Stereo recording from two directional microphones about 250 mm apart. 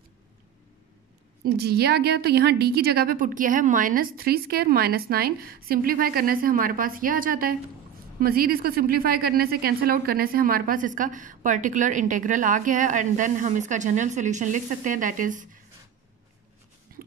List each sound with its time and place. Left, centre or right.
1.4 s a woman's voice: right